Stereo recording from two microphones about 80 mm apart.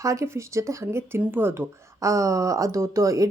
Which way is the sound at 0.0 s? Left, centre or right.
Right.